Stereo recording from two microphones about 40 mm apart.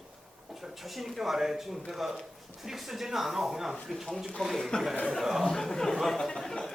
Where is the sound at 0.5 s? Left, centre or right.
Centre.